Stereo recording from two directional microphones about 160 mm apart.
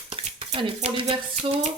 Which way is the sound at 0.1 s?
40° right (ahead or behind).